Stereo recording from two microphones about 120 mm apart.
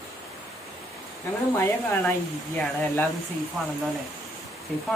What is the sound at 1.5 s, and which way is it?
Speech, 20° left (ahead or behind).